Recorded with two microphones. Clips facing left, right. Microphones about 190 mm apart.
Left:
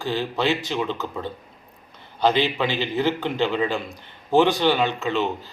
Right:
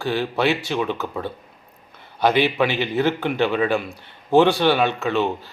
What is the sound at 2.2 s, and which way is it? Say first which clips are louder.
Speech: right 2 dB; 15° right (ahead or behind).